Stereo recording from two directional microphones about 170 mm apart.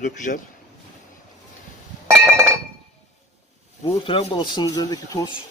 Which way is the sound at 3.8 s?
35° left (ahead or behind).